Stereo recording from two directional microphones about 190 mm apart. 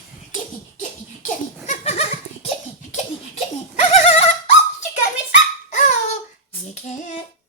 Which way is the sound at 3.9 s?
35° left (ahead or behind).